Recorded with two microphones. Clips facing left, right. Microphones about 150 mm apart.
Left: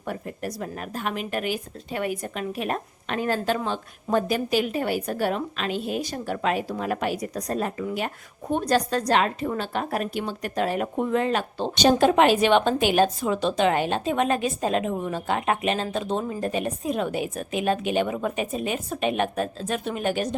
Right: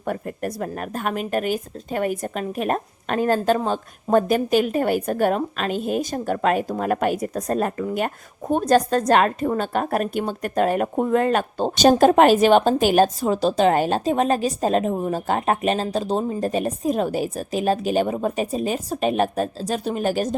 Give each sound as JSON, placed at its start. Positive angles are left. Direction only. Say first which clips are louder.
{"t": 0.0, "sound": "speech", "louder": "right 5 dB", "side_deg": -50}